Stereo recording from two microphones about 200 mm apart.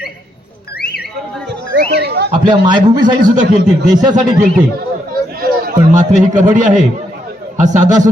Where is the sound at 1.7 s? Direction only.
55° right (ahead or behind).